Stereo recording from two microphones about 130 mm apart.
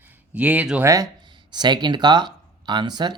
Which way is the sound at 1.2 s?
35° right (ahead or behind).